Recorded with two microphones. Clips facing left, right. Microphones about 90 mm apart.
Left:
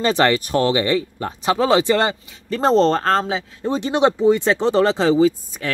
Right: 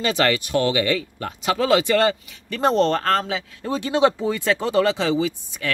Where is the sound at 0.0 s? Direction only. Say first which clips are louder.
Left 4 dB; 35° left (ahead or behind).